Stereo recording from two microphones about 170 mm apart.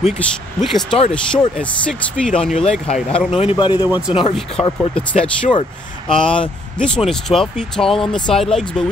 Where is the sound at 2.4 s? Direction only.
40° left (ahead or behind).